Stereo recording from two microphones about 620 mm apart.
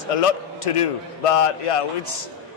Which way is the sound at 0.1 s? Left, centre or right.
Left.